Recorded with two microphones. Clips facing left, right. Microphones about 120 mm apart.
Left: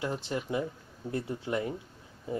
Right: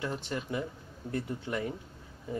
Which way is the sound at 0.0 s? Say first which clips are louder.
Left 2 dB; 15° left (ahead or behind).